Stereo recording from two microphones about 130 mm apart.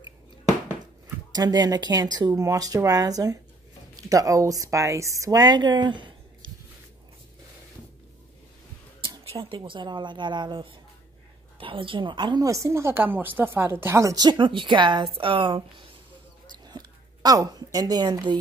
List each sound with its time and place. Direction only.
1.3 s speech: 30° right (ahead or behind)
9.4 s a woman's voice: 40° right (ahead or behind)
12.4 s a woman's voice: 25° right (ahead or behind); by 15.6 s 40° right (ahead or behind)
16.5 s a sound: 30° right (ahead or behind)